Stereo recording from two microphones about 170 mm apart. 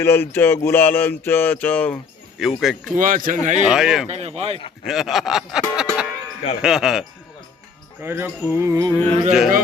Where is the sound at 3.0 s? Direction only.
55° right (ahead or behind).